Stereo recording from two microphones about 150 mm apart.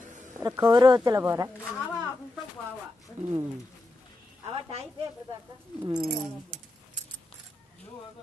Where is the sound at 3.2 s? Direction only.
55° right (ahead or behind).